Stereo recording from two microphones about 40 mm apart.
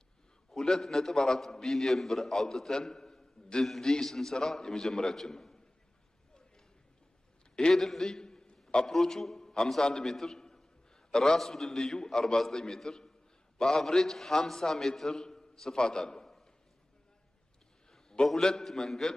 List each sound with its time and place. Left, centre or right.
0.5 s a man's voice: centre
7.7 s a sound: centre
8.8 s a man's voice: centre
18.3 s a man's voice: centre